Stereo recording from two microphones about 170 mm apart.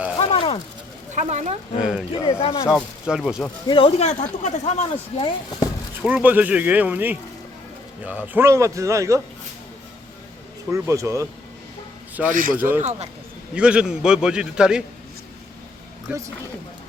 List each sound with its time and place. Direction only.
0.2 s a sound: 35° left (ahead or behind)
1.1 s speech: 45° right (ahead or behind)
1.8 s a man's voice: 5° right (ahead or behind)
2.1 s speech: 35° left (ahead or behind)
2.6 s a man's voice: 5° right (ahead or behind)
3.7 s speech: 30° left (ahead or behind)
5.1 s speech: 30° left (ahead or behind)
6.1 s speech: 10° right (ahead or behind)
10.7 s speech: 15° right (ahead or behind)
12.3 s speech: 50° right (ahead or behind)
12.5 s speech: 10° right (ahead or behind)
12.8 s speech: 40° right (ahead or behind)
13.5 s a man's voice: 5° right (ahead or behind)
16.1 s speech: 5° right (ahead or behind)